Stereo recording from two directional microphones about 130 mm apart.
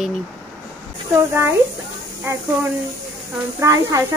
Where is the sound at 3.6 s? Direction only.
25° right (ahead or behind).